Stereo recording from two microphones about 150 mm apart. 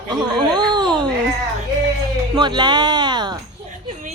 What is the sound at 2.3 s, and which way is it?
Speech, 30° right (ahead or behind).